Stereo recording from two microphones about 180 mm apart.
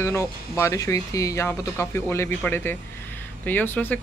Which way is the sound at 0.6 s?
15° left (ahead or behind).